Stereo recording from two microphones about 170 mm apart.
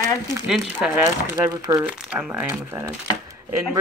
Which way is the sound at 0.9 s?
15° right (ahead or behind).